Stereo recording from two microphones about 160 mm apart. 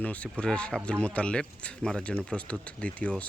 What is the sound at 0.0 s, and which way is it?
Speech, 10° left (ahead or behind).